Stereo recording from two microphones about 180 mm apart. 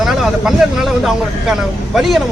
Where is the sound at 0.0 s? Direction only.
Centre (ahead or behind).